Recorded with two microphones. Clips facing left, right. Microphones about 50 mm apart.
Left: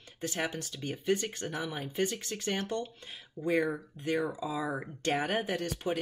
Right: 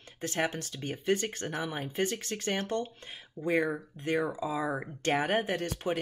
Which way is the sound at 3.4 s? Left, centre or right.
Right.